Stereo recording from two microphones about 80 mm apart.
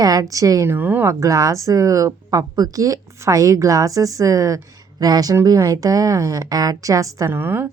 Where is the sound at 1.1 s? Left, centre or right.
Right.